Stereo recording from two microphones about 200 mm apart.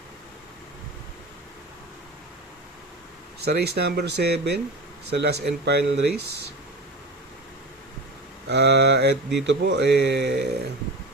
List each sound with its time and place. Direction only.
3.4 s speech: 55° right (ahead or behind)
8.4 s speech: 55° right (ahead or behind)